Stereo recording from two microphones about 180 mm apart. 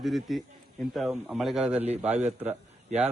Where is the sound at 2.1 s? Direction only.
40° right (ahead or behind).